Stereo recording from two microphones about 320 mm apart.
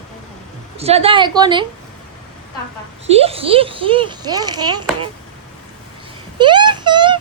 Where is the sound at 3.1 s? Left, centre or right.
Centre.